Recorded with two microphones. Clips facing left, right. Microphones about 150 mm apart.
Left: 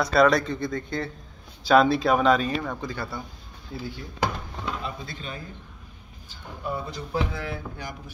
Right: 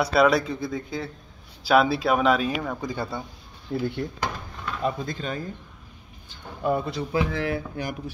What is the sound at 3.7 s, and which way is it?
Speech, 60° right (ahead or behind).